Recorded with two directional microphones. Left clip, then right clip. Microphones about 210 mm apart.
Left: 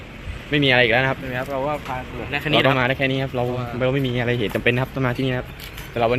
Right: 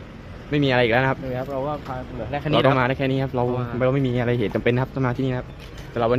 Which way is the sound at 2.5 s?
10° right (ahead or behind).